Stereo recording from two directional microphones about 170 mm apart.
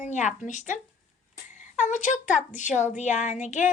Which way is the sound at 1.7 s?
45° left (ahead or behind).